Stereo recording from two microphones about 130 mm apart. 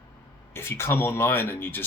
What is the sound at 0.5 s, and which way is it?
Speech, 20° left (ahead or behind).